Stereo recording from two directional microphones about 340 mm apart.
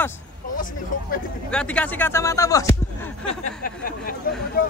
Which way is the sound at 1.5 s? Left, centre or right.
Centre.